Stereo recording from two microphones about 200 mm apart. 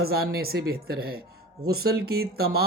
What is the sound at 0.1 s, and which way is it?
Speech, 50° right (ahead or behind).